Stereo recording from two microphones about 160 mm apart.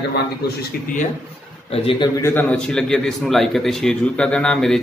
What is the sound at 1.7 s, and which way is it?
Speech, 35° left (ahead or behind).